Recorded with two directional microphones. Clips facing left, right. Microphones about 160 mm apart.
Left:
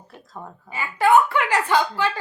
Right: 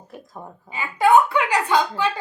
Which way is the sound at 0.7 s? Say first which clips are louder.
Right 1 dB; 15° right (ahead or behind).